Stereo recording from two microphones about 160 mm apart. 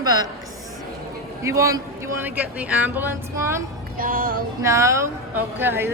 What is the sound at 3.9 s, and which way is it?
Music, 65° right (ahead or behind).